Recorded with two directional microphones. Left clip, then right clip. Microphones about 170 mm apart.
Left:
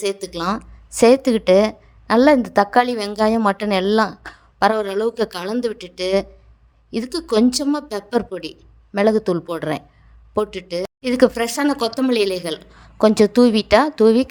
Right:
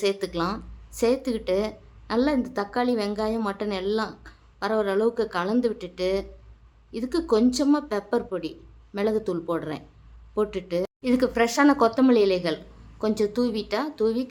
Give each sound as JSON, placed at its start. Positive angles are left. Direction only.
{"t": 0.0, "sound": "a woman's voice", "side_deg": 50}
{"t": 11.3, "sound": "speech", "side_deg": 0}
{"t": 11.6, "sound": "a woman's voice", "side_deg": 50}
{"t": 12.3, "sound": "speech", "side_deg": -5}
{"t": 13.0, "sound": "a woman's voice", "side_deg": 50}